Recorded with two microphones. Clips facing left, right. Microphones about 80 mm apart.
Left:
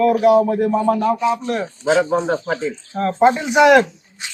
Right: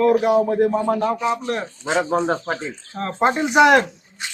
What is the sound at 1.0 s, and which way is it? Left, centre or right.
Speech, right.